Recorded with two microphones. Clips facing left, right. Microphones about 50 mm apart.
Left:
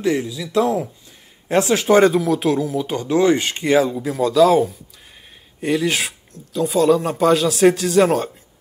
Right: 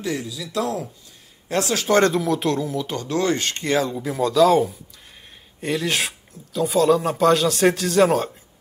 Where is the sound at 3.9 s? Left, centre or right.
Centre.